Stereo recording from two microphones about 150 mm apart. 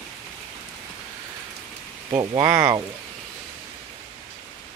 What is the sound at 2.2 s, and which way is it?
Speech, 25° right (ahead or behind).